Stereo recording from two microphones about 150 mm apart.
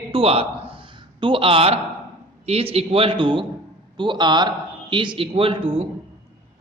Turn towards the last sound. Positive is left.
turn(degrees=-35)  # may be behind; listen again after turning